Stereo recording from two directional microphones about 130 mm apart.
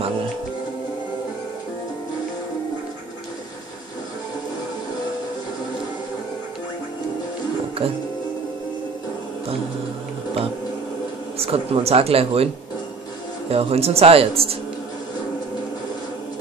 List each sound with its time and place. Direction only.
7.8 s speech: 45° right (ahead or behind)
11.3 s speech: 50° right (ahead or behind)
13.5 s speech: 50° right (ahead or behind)